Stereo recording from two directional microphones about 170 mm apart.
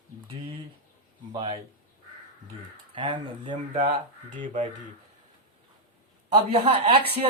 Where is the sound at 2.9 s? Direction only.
30° right (ahead or behind).